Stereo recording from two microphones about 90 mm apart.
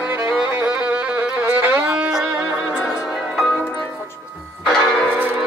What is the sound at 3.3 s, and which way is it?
Music, centre (ahead or behind).